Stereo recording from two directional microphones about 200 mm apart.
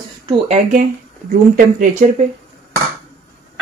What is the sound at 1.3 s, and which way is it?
Speech, 40° right (ahead or behind).